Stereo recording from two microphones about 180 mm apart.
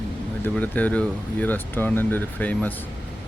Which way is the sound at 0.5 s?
10° left (ahead or behind).